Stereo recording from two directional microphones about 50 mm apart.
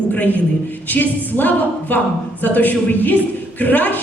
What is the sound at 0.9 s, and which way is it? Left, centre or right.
A woman's voice, left.